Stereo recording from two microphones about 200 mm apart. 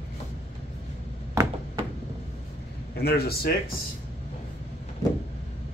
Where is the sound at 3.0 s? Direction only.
50° left (ahead or behind).